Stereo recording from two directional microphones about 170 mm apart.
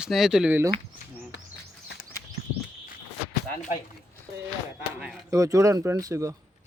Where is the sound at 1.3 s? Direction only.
90° left.